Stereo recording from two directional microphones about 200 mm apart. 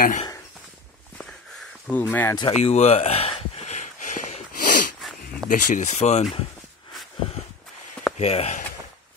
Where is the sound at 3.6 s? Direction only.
35° left (ahead or behind).